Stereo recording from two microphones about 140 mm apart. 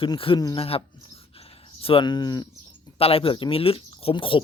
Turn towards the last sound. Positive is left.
turn(degrees=40)  # may be behind; listen again after turning